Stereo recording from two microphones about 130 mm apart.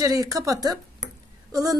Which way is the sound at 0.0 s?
25° right (ahead or behind).